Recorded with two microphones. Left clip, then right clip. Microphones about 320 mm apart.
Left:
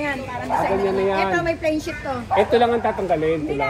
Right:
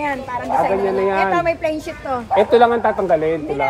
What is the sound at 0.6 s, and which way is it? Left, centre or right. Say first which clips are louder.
A woman's voice: right 3 dB; right.